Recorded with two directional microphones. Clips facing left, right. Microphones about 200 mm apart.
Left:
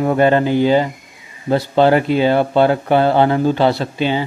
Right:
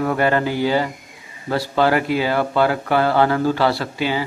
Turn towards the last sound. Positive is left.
turn(degrees=25)  # may be behind; listen again after turning